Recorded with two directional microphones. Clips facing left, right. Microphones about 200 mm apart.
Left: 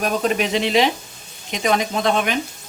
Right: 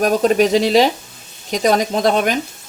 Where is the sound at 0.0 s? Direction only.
40° right (ahead or behind).